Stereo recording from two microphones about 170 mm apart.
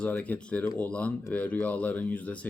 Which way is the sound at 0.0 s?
10° left (ahead or behind).